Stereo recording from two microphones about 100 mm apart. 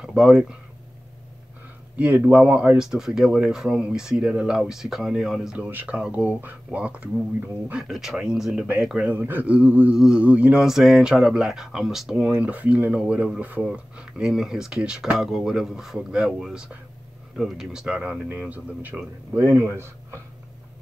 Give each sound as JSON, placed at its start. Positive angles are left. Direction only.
{"t": 0.0, "sound": "speech", "side_deg": -5}
{"t": 2.0, "sound": "speech", "side_deg": -15}
{"t": 5.7, "sound": "speech", "side_deg": -20}